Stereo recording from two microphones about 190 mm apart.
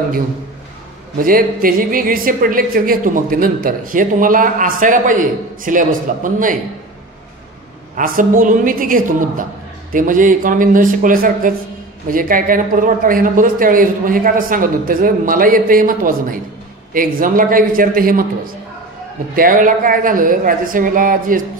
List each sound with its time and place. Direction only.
1.2 s a woman's voice: 50° right (ahead or behind)
7.9 s a woman's voice: 45° right (ahead or behind)
19.3 s a woman's voice: 45° right (ahead or behind)